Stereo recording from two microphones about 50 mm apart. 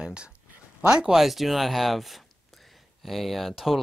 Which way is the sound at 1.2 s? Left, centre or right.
Centre.